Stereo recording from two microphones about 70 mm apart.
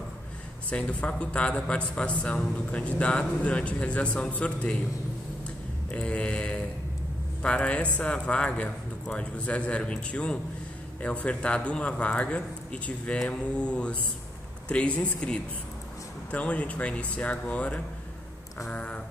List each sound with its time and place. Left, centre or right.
0.7 s speech: centre
5.9 s speech: centre
15.1 s speech: centre